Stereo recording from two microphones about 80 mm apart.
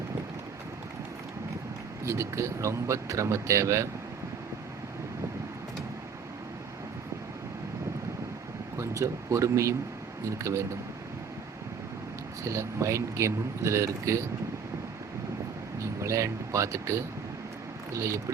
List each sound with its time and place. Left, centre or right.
2.0 s speech: right
8.8 s speech: right
12.4 s speech: right
15.8 s speech: right